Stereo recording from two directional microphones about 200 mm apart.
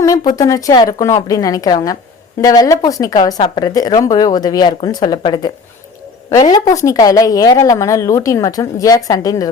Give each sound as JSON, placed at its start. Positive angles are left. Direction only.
{"t": 0.0, "sound": "a woman's voice", "side_deg": 15}